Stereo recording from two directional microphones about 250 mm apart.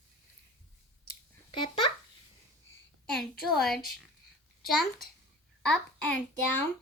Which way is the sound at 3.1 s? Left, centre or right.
Centre.